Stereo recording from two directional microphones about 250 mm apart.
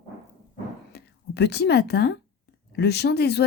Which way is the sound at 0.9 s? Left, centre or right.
Left.